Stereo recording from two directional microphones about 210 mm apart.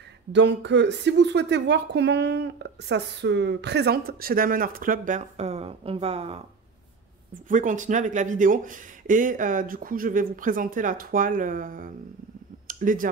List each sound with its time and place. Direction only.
0.3 s a woman's voice: 55° right (ahead or behind); by 6.4 s 30° right (ahead or behind)
7.4 s speech: 35° right (ahead or behind)